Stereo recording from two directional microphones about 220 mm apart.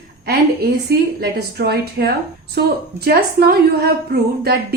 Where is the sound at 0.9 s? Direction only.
45° right (ahead or behind).